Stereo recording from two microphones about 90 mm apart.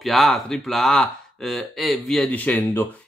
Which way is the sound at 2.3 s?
20° left (ahead or behind).